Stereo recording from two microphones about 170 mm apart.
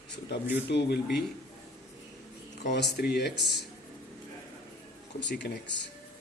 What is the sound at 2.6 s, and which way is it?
Speech, 85° left.